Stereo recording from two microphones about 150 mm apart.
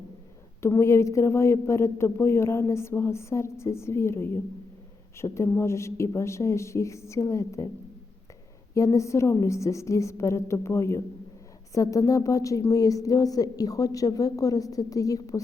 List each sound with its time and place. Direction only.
0.6 s a woman's voice: 15° left (ahead or behind)
8.7 s a woman's voice: 20° left (ahead or behind)